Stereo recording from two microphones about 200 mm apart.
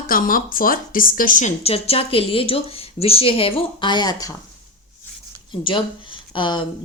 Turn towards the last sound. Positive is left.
turn(degrees=25)  # may be behind; listen again after turning